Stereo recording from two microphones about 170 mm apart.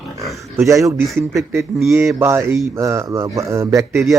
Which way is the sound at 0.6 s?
15° right (ahead or behind).